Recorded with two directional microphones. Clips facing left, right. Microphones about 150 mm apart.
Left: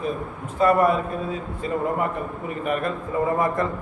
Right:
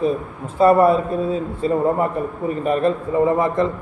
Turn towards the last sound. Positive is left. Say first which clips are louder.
# right 5 dB
turn(degrees=-25)  # may be behind; listen again after turning